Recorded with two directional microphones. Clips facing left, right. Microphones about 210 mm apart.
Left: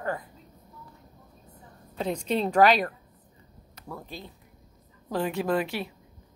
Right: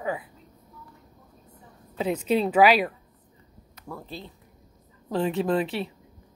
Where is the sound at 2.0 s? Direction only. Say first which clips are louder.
Right 3 dB; 5° right (ahead or behind).